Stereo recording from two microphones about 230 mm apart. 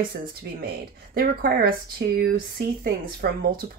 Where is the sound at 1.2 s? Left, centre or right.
Right.